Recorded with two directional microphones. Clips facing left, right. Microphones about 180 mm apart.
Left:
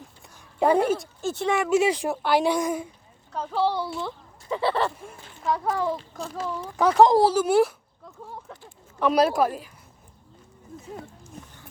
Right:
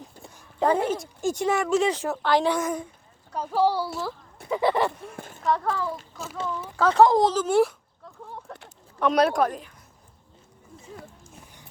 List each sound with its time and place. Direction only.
1.2 s speech: 15° right (ahead or behind)
1.5 s a woman's voice: 5° left (ahead or behind)
3.3 s speech: 10° right (ahead or behind)
5.1 s speech: 50° right (ahead or behind)
5.4 s a child's voice: 5° left (ahead or behind)
5.6 s speech: 20° left (ahead or behind)
6.1 s speech: 45° left (ahead or behind)
6.7 s a woman's voice: 15° left (ahead or behind)
9.0 s speech: centre (ahead or behind)